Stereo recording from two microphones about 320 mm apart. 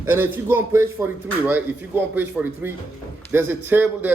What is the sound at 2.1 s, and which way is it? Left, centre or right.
A man's voice, centre.